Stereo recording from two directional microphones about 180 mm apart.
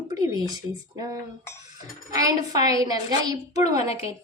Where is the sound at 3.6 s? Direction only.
40° left (ahead or behind).